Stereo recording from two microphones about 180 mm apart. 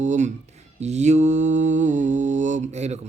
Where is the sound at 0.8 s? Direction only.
40° right (ahead or behind).